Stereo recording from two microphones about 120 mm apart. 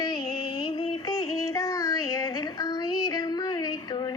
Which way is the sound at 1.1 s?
25° left (ahead or behind).